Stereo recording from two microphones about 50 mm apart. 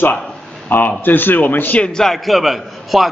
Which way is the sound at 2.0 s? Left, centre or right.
Centre.